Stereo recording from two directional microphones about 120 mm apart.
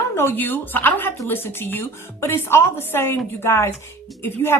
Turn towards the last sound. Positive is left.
turn(degrees=20)  # may be behind; listen again after turning